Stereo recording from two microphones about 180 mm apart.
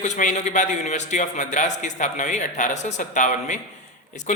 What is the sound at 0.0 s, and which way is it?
A man's voice, 40° left (ahead or behind).